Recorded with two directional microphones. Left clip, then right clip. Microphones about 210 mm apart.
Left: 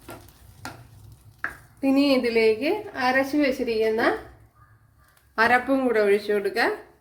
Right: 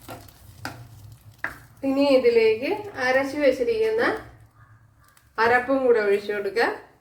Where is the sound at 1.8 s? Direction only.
50° left (ahead or behind).